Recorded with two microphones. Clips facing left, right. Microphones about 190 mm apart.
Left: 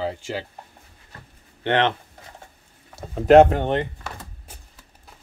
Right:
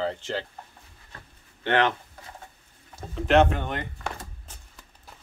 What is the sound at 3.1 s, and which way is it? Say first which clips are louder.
Speech: left 8 dB; 35° left (ahead or behind).